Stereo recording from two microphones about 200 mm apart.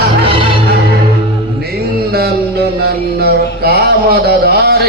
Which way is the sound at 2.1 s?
50° right (ahead or behind).